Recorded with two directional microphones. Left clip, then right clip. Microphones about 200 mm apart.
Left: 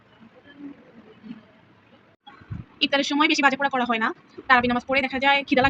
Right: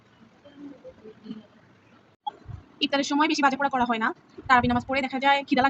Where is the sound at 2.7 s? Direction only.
5° right (ahead or behind).